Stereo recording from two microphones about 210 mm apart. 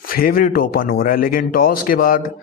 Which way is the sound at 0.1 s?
45° left (ahead or behind).